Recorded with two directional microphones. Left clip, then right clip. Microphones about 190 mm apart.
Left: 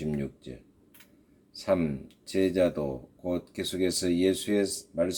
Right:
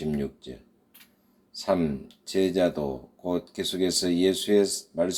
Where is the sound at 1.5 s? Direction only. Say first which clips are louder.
Right 2 dB; 40° left (ahead or behind).